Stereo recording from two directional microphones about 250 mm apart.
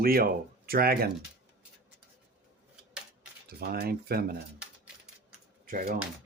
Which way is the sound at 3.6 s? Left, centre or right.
Right.